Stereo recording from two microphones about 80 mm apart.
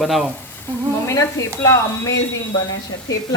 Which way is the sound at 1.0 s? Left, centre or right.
Left.